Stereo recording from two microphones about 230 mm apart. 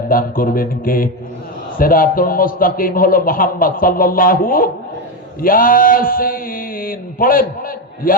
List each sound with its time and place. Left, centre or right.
0.1 s a man's voice: left